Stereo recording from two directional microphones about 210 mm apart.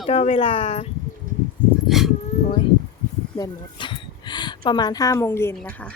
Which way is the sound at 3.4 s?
20° left (ahead or behind).